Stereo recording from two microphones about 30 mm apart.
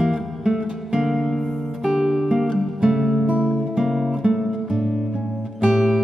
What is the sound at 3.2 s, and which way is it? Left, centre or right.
Music, right.